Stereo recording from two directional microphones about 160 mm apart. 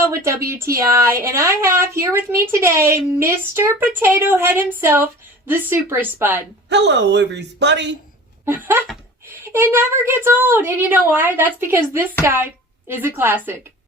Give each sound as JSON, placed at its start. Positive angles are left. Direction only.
{"t": 0.0, "sound": "a woman's voice", "side_deg": -15}
{"t": 6.7, "sound": "speech", "side_deg": -90}
{"t": 8.4, "sound": "a woman's voice", "side_deg": -15}